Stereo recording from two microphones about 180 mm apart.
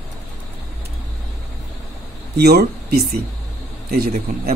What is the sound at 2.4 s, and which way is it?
Speech, 60° right (ahead or behind).